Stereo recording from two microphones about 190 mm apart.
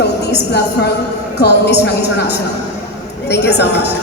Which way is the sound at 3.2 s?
60° left (ahead or behind).